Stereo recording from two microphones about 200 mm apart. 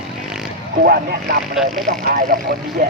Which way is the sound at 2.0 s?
45° right (ahead or behind).